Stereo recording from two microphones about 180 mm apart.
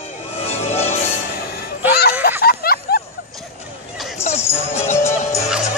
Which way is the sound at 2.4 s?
55° left (ahead or behind).